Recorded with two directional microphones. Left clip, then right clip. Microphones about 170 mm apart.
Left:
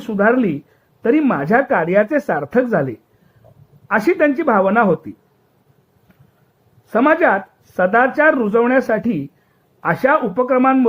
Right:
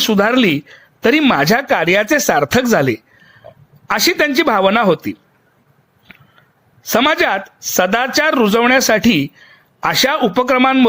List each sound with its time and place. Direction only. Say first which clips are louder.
0.0 s a woman's voice: right 3 dB; 45° right (ahead or behind)
6.9 s a woman's voice: even; 35° right (ahead or behind)
10.6 s speech: right 1 dB; 30° right (ahead or behind)